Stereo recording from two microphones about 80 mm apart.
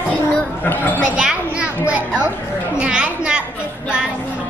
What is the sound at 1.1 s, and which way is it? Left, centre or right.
Children playing, centre.